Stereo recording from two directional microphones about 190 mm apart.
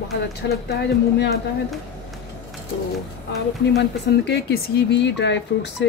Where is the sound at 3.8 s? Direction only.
65° left (ahead or behind).